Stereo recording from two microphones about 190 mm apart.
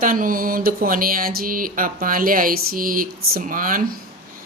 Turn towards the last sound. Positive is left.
turn(degrees=-45)  # may be behind; listen again after turning